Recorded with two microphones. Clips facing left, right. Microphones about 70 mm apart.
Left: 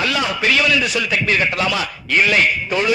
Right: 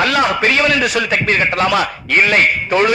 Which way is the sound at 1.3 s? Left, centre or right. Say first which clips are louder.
Right 5 dB; right.